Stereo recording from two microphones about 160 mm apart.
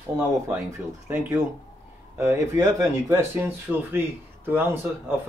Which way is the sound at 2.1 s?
20° right (ahead or behind).